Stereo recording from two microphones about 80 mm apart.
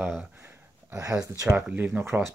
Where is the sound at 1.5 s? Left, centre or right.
Centre.